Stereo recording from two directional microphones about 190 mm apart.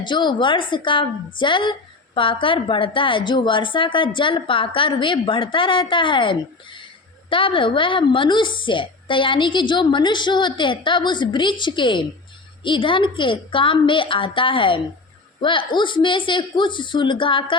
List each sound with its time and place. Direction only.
0.0 s a woman's voice: 25° left (ahead or behind)